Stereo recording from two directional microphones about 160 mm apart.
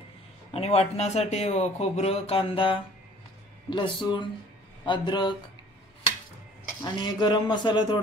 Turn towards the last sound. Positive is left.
turn(degrees=30)  # may be behind; listen again after turning